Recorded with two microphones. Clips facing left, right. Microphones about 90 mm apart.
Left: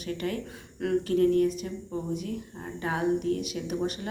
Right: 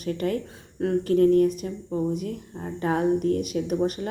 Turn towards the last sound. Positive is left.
turn(degrees=-45)  # may be behind; listen again after turning